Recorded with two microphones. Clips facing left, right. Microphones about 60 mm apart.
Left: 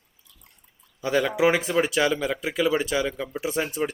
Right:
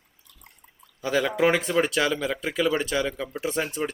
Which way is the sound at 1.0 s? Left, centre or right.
Centre.